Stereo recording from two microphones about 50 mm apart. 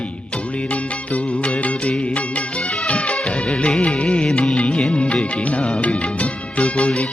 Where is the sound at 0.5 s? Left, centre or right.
Left.